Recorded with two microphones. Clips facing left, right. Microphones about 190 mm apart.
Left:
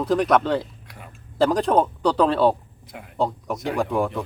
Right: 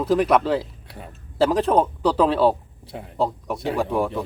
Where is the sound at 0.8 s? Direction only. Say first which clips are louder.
Right 4 dB; 30° right (ahead or behind).